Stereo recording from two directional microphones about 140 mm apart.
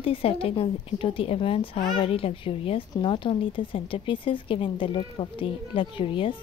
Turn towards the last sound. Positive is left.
turn(degrees=40)  # may be behind; listen again after turning